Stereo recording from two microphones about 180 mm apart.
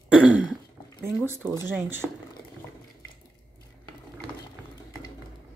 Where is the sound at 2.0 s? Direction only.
10° left (ahead or behind).